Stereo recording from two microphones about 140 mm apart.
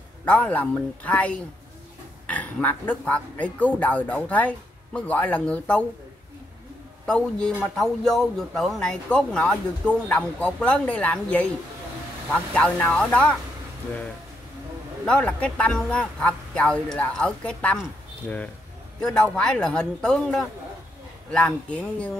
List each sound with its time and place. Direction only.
0.2 s speech: 10° left (ahead or behind)
7.1 s speech: 5° left (ahead or behind)
15.0 s speech: 10° left (ahead or behind)
18.9 s a man's voice: 5° left (ahead or behind)